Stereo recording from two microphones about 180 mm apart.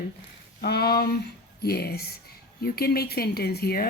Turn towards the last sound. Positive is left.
turn(degrees=60)  # may be behind; listen again after turning